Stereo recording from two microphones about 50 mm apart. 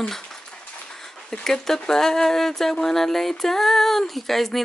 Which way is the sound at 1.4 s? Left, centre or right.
Centre.